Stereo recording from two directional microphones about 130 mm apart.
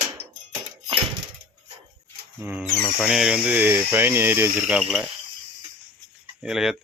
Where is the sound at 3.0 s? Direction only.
5° right (ahead or behind).